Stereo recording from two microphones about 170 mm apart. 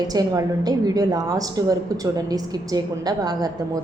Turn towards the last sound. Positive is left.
turn(degrees=-20)  # may be behind; listen again after turning